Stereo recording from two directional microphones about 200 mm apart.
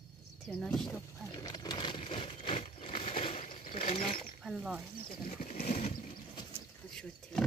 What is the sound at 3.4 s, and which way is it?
Mechanisms, 30° left (ahead or behind).